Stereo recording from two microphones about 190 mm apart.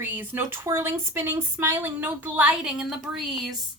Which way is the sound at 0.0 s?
10° right (ahead or behind).